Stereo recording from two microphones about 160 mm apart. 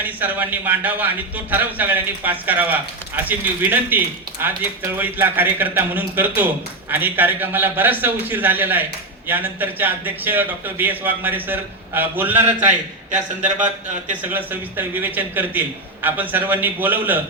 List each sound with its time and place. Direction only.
0.0 s a man's voice: 10° right (ahead or behind)
14.2 s a man's voice: 10° right (ahead or behind)